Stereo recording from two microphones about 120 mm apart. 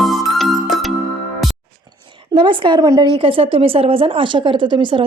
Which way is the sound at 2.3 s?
45° right (ahead or behind).